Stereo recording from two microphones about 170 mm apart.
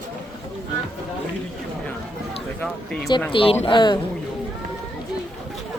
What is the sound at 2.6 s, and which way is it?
Speech, 5° left (ahead or behind).